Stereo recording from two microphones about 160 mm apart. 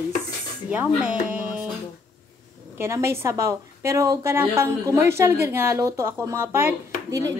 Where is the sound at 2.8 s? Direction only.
15° right (ahead or behind).